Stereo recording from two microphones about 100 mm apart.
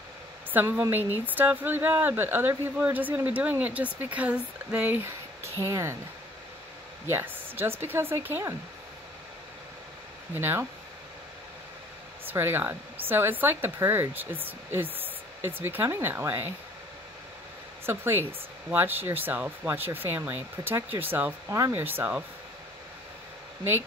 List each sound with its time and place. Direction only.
0.5 s speech: 20° right (ahead or behind)
5.4 s speech: 30° right (ahead or behind)
7.1 s speech: 25° right (ahead or behind)
10.3 s speech: 20° right (ahead or behind)
12.3 s speech: 20° right (ahead or behind)
17.8 s speech: 25° right (ahead or behind)